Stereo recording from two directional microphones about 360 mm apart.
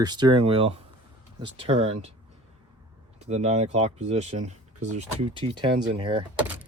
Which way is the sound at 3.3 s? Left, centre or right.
Centre.